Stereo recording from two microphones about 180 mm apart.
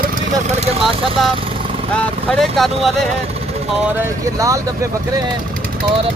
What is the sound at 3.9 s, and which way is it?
Speech, 15° right (ahead or behind).